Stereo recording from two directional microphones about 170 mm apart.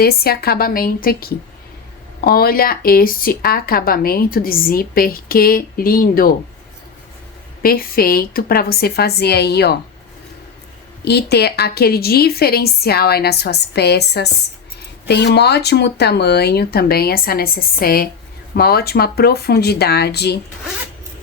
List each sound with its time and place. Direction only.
0.0 s speech: 65° left (ahead or behind)
7.6 s speech: 60° left (ahead or behind)
11.0 s a woman's voice: 75° left (ahead or behind)